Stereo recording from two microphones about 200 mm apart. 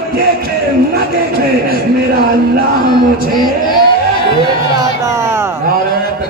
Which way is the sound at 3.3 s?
20° left (ahead or behind).